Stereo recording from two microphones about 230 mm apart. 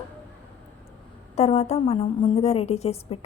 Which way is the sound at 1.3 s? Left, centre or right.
Left.